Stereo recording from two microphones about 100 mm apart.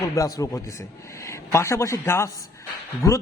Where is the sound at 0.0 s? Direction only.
35° left (ahead or behind).